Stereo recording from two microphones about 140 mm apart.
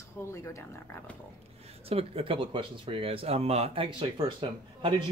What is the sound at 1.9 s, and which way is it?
Speech, 45° right (ahead or behind).